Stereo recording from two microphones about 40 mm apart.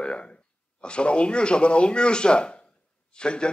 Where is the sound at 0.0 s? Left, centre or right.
Left.